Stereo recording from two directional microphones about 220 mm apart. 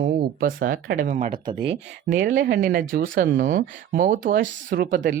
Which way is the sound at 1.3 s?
25° right (ahead or behind).